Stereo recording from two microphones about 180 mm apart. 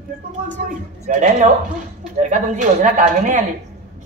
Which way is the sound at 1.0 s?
45° right (ahead or behind).